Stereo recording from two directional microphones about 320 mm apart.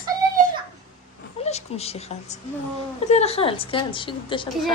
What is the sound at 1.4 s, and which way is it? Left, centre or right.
A woman's voice, centre.